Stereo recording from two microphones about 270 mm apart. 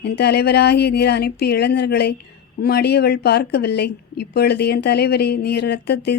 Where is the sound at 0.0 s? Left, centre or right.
Left.